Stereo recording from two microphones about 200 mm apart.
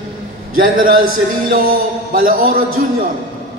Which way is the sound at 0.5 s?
45° right (ahead or behind).